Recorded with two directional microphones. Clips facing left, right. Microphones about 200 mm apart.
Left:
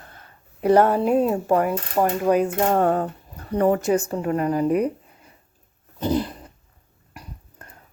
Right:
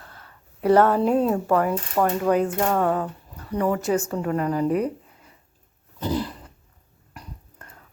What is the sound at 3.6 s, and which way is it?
Speech, 25° left (ahead or behind).